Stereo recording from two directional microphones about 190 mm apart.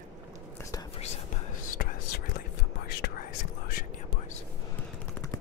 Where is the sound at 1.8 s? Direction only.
55° left (ahead or behind).